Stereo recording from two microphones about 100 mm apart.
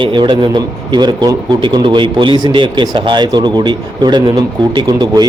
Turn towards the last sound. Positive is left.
turn(degrees=-45)  # may be behind; listen again after turning